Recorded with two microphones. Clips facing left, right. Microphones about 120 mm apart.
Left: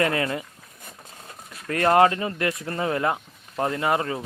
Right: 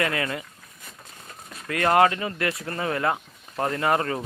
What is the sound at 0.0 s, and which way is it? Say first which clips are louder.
Speech: left 3 dB; 30° left (ahead or behind).